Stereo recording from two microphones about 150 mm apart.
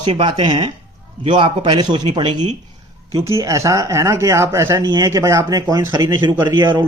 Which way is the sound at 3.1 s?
20° right (ahead or behind).